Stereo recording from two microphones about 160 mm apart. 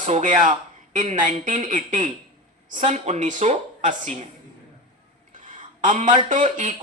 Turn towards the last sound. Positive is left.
turn(degrees=-50)  # may be behind; listen again after turning